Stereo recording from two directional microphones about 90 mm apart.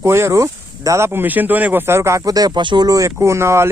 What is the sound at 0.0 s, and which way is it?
Speech, 30° right (ahead or behind).